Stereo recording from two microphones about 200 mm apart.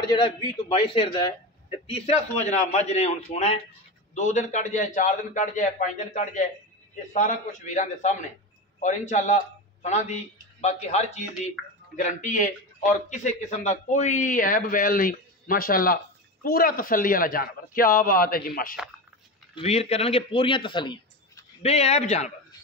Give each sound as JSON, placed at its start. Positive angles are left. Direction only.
{"t": 0.0, "sound": "a man's voice", "side_deg": 20}
{"t": 19.5, "sound": "speech", "side_deg": 30}